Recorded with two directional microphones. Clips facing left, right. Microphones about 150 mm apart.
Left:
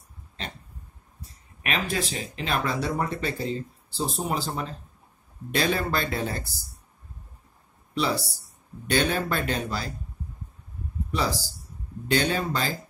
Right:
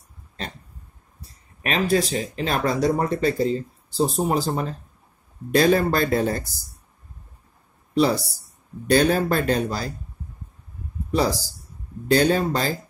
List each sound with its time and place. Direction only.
1.2 s speech: 35° right (ahead or behind)
7.9 s speech: 40° right (ahead or behind)
11.1 s speech: 40° right (ahead or behind)